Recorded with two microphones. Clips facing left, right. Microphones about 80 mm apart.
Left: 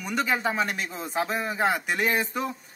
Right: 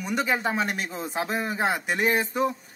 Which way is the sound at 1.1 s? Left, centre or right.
Centre.